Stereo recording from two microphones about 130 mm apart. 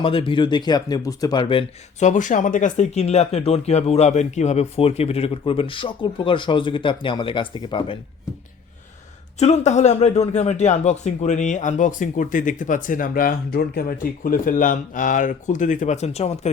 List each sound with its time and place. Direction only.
0.0 s speech: 45° left (ahead or behind)
2.0 s speech: 75° left (ahead or behind); by 7.9 s 40° left (ahead or behind)
9.4 s speech: 60° left (ahead or behind)